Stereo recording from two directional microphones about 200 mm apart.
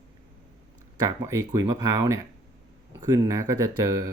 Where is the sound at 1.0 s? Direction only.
15° right (ahead or behind).